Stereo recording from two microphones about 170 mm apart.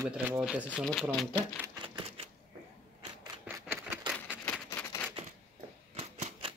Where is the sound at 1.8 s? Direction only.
35° right (ahead or behind).